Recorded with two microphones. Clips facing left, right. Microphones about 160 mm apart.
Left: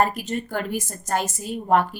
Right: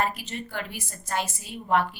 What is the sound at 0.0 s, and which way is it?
Speech, 45° left (ahead or behind).